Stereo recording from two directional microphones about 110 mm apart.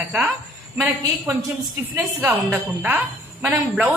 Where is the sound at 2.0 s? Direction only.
15° right (ahead or behind).